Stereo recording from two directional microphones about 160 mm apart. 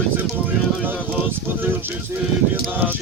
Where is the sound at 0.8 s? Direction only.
10° right (ahead or behind).